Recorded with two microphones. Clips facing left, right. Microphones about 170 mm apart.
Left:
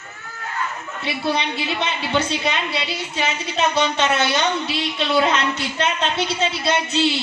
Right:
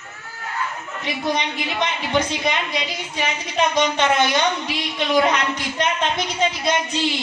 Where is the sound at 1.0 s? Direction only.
15° right (ahead or behind).